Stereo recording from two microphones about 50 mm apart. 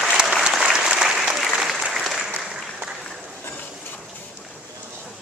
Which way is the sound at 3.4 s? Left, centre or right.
Left.